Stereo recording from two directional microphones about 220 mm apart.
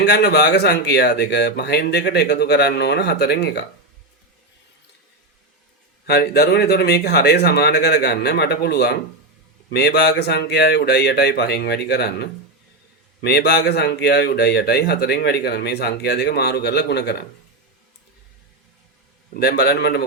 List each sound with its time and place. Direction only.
0.0 s speech: 50° left (ahead or behind)
6.1 s speech: 45° left (ahead or behind)
19.3 s speech: 50° left (ahead or behind)